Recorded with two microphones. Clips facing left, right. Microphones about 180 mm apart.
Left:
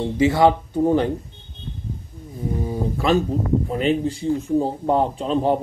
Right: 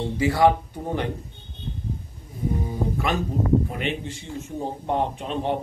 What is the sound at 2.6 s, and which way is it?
Speech, 30° left (ahead or behind).